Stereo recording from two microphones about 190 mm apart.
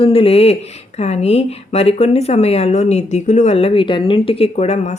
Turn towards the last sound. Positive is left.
turn(degrees=35)  # may be behind; listen again after turning